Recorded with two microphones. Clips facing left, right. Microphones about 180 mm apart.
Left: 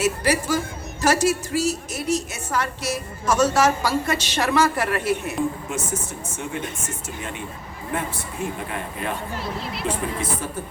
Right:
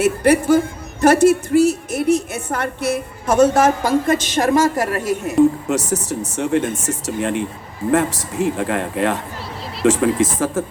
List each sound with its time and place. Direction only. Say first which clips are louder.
0.0 s a woman's voice: right 7 dB; 55° right (ahead or behind)
5.4 s a man's voice: right 11 dB; 75° right (ahead or behind)